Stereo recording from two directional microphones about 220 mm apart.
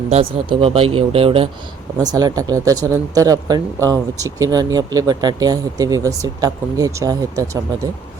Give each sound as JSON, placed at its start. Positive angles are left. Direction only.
{"t": 0.4, "sound": "speech", "side_deg": -25}